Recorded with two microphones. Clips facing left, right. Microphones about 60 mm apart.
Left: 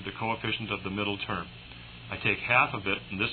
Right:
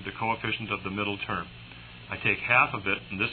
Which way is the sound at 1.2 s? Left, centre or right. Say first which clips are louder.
Right 2 dB; centre.